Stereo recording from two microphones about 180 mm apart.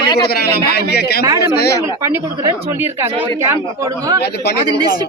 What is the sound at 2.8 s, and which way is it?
Speech, 10° right (ahead or behind).